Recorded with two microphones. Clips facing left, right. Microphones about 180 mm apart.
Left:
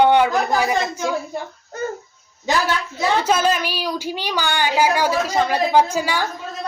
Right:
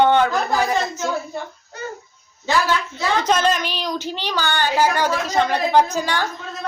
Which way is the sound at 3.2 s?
10° left (ahead or behind).